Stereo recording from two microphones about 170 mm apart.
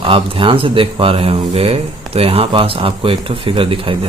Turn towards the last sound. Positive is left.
turn(degrees=-30)  # may be behind; listen again after turning